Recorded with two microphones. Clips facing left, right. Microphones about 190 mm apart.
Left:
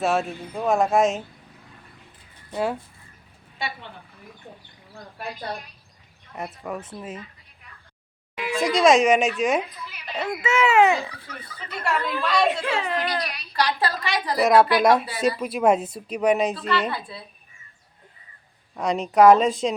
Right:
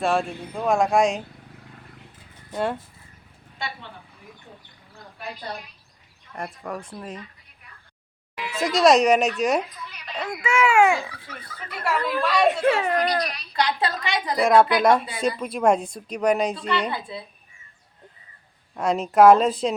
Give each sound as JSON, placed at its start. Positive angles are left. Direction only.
{"t": 0.0, "sound": "a woman's voice", "side_deg": 5}
{"t": 6.3, "sound": "a woman's voice", "side_deg": 5}
{"t": 8.4, "sound": "speech", "side_deg": 0}
{"t": 10.6, "sound": "a woman's voice", "side_deg": -10}
{"t": 12.5, "sound": "a woman's voice", "side_deg": -45}
{"t": 13.2, "sound": "a woman's voice", "side_deg": 0}
{"t": 13.6, "sound": "a woman's voice", "side_deg": -20}
{"t": 14.3, "sound": "a woman's voice", "side_deg": 5}
{"t": 16.9, "sound": "a woman's voice", "side_deg": -20}
{"t": 18.7, "sound": "a woman's voice", "side_deg": 0}